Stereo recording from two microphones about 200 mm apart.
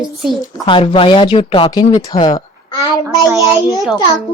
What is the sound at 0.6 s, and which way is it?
Speech, 25° left (ahead or behind).